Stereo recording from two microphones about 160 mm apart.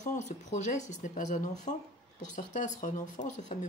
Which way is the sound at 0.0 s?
50° left (ahead or behind).